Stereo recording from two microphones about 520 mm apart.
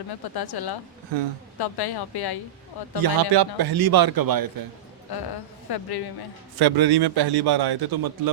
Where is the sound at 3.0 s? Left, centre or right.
Right.